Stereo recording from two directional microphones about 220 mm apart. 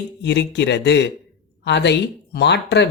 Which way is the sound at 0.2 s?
50° left (ahead or behind).